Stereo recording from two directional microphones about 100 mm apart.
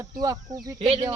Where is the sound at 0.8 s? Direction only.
75° right (ahead or behind).